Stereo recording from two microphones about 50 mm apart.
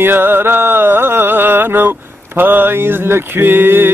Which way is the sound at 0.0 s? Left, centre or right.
Right.